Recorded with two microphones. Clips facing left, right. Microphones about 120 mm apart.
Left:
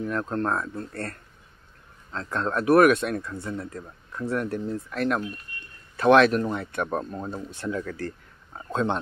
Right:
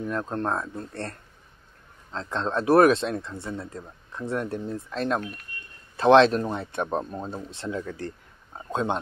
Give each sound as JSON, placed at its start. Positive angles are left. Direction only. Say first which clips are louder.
{"t": 0.0, "sound": "speech", "louder": "left 1 dB", "side_deg": -20}
{"t": 2.1, "sound": "speech", "louder": "even", "side_deg": -20}